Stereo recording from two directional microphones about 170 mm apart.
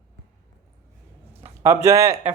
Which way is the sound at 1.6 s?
15° right (ahead or behind).